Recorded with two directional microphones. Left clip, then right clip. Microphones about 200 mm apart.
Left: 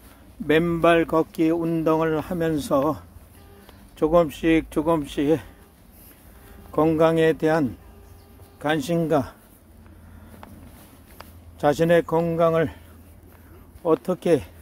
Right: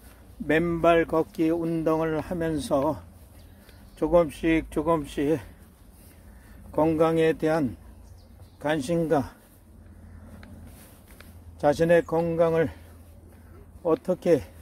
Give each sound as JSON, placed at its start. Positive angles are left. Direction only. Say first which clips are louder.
{"t": 0.5, "sound": "speech", "louder": "left 3 dB", "side_deg": 20}
{"t": 4.0, "sound": "speech", "louder": "left 3 dB", "side_deg": 20}
{"t": 6.7, "sound": "speech", "louder": "left 3 dB", "side_deg": 25}
{"t": 11.6, "sound": "speech", "louder": "left 2 dB", "side_deg": 25}
{"t": 13.8, "sound": "speech", "louder": "left 2 dB", "side_deg": 25}